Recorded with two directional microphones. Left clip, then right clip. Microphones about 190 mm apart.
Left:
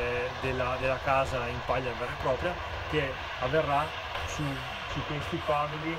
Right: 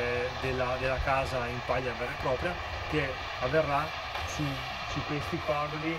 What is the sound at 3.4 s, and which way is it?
Speech, 20° left (ahead or behind).